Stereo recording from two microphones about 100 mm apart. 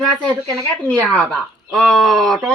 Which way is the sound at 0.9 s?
5° left (ahead or behind).